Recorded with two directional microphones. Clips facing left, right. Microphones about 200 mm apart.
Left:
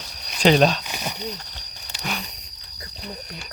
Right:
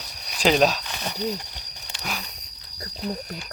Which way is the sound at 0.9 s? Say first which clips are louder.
Left 1 dB; 10° left (ahead or behind).